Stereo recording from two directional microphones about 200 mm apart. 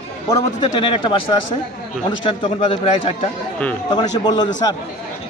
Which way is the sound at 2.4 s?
30° left (ahead or behind).